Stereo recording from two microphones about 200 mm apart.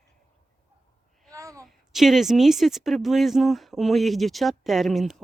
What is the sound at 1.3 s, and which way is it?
Babbling, 15° right (ahead or behind).